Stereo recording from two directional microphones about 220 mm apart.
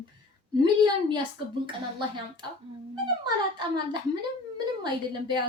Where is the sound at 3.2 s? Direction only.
20° right (ahead or behind).